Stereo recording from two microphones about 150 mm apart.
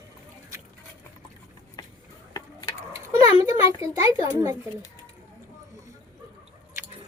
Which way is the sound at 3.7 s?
20° right (ahead or behind).